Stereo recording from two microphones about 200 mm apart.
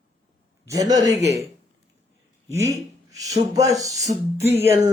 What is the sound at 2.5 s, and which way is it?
A man's voice, 15° right (ahead or behind).